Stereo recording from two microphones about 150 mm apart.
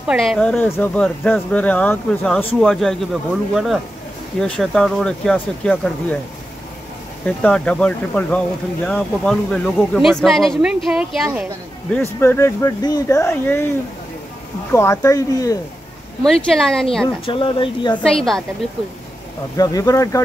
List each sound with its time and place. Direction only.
0.0 s speech: centre (ahead or behind)
7.4 s speech: 5° left (ahead or behind)
11.9 s speech: 15° left (ahead or behind)
14.7 s speech: 20° left (ahead or behind)
16.3 s speech: 5° left (ahead or behind)
17.3 s speech: 35° left (ahead or behind)
18.0 s speech: 5° left (ahead or behind)
19.5 s speech: 25° left (ahead or behind)